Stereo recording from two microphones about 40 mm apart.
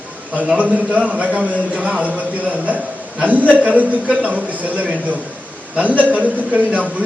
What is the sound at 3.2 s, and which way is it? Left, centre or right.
A man's voice, right.